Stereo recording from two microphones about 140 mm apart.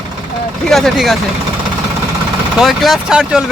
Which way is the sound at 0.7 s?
Centre (ahead or behind).